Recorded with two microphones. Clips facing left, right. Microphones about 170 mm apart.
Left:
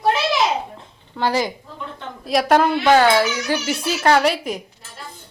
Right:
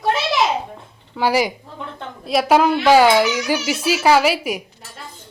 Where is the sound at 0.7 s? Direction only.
10° right (ahead or behind).